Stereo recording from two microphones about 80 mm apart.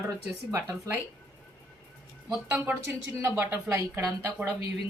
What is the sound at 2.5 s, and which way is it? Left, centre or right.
Speech, right.